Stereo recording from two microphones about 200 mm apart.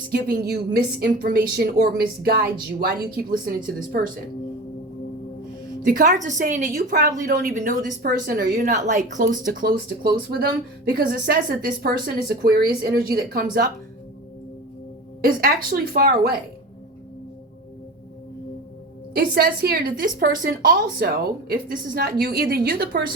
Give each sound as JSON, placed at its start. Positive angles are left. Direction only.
{"t": 0.1, "sound": "a woman's voice", "side_deg": -50}
{"t": 5.8, "sound": "a woman's voice", "side_deg": -45}
{"t": 15.2, "sound": "a woman's voice", "side_deg": -50}
{"t": 19.1, "sound": "a woman's voice", "side_deg": -50}